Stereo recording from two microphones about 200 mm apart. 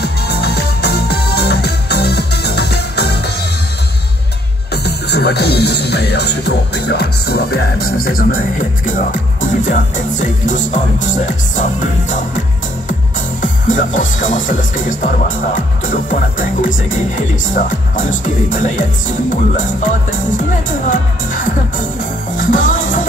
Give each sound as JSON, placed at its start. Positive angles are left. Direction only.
{"t": 0.0, "sound": "music", "side_deg": 55}
{"t": 4.8, "sound": "music", "side_deg": 55}
{"t": 8.8, "sound": "speech", "side_deg": 40}
{"t": 12.1, "sound": "music", "side_deg": 40}
{"t": 13.4, "sound": "speech", "side_deg": 40}
{"t": 22.4, "sound": "music", "side_deg": 40}